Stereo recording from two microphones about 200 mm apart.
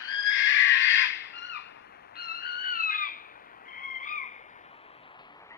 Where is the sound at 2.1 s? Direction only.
55° left (ahead or behind).